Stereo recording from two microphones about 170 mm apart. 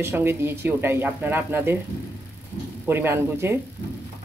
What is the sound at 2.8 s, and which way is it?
Speech, 15° right (ahead or behind).